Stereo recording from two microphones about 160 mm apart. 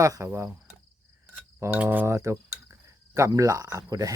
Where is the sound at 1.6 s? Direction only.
10° right (ahead or behind).